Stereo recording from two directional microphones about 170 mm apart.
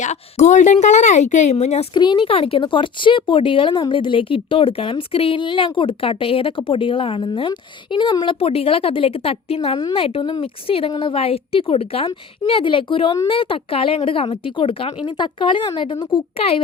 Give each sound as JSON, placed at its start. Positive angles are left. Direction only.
{"t": 0.0, "sound": "a woman's voice", "side_deg": 45}
{"t": 1.9, "sound": "speech", "side_deg": 30}